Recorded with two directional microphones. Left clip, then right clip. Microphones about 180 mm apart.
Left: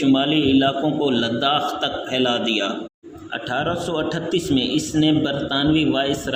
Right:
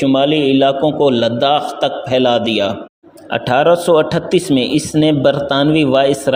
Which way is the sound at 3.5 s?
40° right (ahead or behind).